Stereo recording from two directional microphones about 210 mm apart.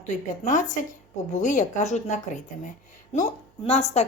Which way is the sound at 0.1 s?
35° left (ahead or behind).